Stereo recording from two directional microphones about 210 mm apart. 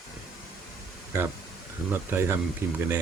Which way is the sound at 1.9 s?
10° right (ahead or behind).